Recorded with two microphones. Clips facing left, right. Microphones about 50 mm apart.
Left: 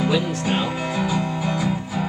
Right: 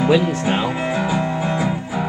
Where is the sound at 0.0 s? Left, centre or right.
Right.